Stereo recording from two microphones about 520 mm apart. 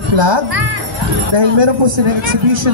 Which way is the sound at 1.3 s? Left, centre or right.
Right.